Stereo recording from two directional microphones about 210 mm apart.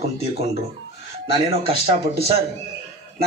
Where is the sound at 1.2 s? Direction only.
25° right (ahead or behind).